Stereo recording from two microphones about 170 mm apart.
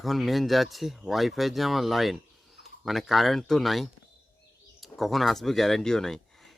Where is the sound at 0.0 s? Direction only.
Centre (ahead or behind).